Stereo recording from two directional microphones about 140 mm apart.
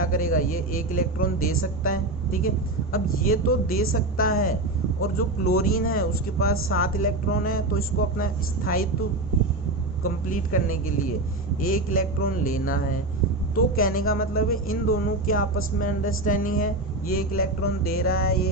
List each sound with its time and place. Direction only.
0.0 s a man's voice: 85° left
10.0 s a man's voice: 75° left (ahead or behind)
13.7 s speech: 90° left